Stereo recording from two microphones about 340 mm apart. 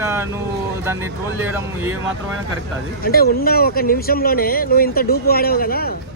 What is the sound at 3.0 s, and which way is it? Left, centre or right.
Speech, left.